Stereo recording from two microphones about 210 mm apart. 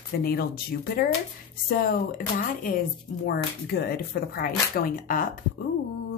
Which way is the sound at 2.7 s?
40° left (ahead or behind).